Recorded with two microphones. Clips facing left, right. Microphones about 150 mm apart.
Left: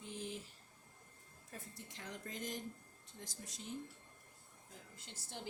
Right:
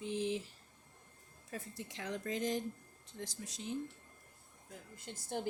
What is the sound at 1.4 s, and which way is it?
Speech, 90° right.